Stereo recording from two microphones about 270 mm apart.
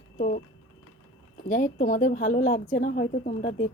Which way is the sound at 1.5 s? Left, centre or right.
Left.